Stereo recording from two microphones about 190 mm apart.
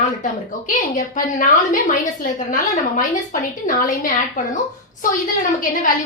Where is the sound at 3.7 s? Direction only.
45° left (ahead or behind).